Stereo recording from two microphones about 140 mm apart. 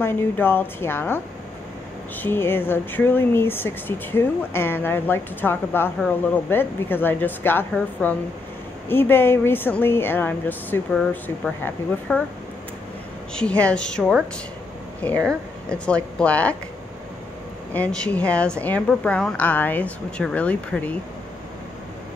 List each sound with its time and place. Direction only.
0.0 s speech: 15° left (ahead or behind)
2.2 s speech: 15° left (ahead or behind)
13.3 s speech: 5° left (ahead or behind)
17.7 s speech: 10° left (ahead or behind)